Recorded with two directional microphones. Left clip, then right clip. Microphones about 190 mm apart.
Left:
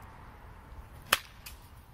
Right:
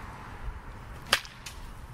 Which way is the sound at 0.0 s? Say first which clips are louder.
Right 8 dB; 50° right (ahead or behind).